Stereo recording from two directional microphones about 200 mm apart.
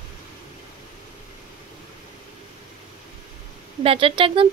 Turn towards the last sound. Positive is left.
turn(degrees=-25)  # may be behind; listen again after turning